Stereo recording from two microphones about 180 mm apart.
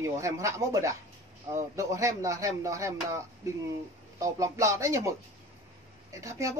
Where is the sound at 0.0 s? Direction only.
15° right (ahead or behind).